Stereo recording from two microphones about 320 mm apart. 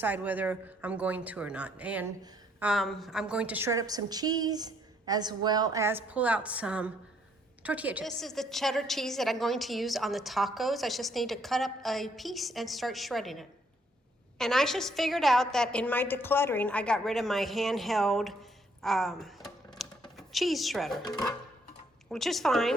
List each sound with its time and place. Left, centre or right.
0.0 s a woman's voice: centre
18.8 s a sound: centre
20.1 s speech: centre
21.0 s speech: centre
22.1 s a woman's voice: centre